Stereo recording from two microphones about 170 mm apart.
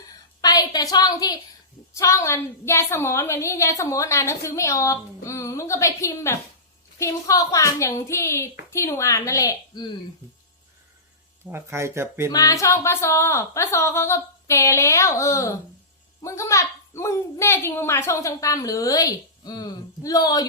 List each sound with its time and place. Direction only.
0.4 s a woman's voice: 20° left (ahead or behind)
11.5 s speech: 15° right (ahead or behind)
12.3 s a woman's voice: 20° left (ahead or behind)